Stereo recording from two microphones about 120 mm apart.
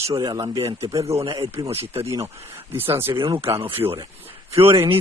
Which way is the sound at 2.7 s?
20° right (ahead or behind).